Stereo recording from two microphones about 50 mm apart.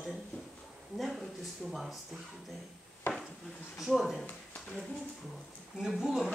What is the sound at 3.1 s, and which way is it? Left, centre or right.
Dishes, left.